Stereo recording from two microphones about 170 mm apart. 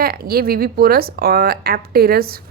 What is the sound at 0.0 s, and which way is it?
A woman's voice, 60° right (ahead or behind).